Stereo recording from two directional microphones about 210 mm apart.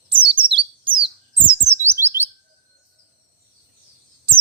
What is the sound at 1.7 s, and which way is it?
Chirp, 10° right (ahead or behind).